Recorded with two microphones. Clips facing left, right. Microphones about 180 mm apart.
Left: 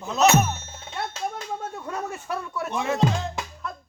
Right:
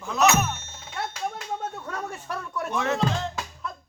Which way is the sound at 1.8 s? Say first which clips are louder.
Left 2 dB; 10° left (ahead or behind).